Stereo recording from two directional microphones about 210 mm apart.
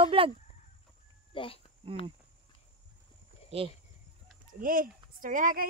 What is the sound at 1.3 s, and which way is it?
Speech, 25° left (ahead or behind).